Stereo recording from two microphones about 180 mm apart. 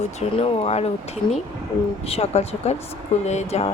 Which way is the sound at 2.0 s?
35° left (ahead or behind).